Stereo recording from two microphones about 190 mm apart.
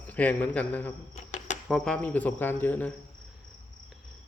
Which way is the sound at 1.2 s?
40° left (ahead or behind).